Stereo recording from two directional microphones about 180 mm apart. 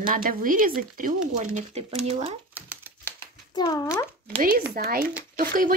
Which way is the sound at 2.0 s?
35° right (ahead or behind).